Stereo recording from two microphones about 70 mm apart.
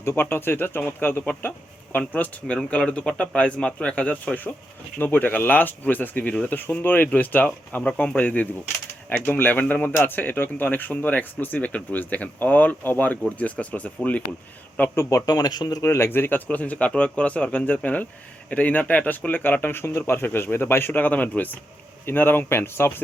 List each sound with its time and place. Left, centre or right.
0.0 s speech: left
15.3 s speech: left
15.8 s speech: left
16.0 s speech: left